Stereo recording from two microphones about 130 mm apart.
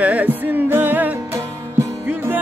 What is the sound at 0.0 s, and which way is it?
Music, 10° right (ahead or behind).